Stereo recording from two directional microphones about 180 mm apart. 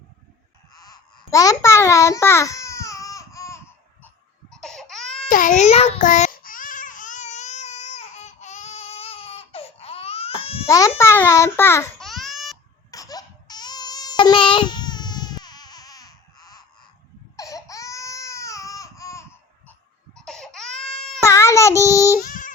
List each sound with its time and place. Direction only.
0.7 s babbling: 20° left (ahead or behind)
4.0 s baby cry: 5° left (ahead or behind)
5.3 s baby cry: 45° left (ahead or behind)
10.7 s a child's voice: 20° left (ahead or behind)
11.9 s babbling: centre (ahead or behind)
12.9 s baby cry: 20° left (ahead or behind)
20.1 s baby cry: 5° left (ahead or behind)
21.2 s child singing: 15° left (ahead or behind)
22.2 s a sound: 50° left (ahead or behind)